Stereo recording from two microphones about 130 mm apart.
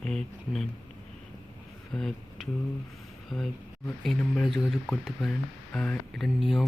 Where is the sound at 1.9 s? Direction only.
5° left (ahead or behind).